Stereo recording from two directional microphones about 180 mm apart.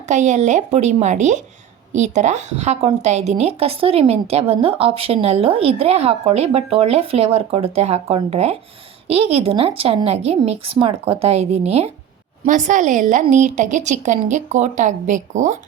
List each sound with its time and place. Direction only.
0.1 s a woman's voice: 40° right (ahead or behind)